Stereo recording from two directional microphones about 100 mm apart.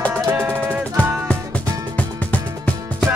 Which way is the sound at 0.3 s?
20° right (ahead or behind).